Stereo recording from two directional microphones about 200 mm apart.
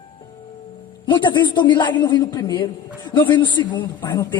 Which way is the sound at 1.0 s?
25° left (ahead or behind).